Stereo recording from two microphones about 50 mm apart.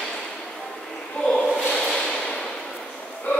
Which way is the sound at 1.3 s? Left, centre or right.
Centre.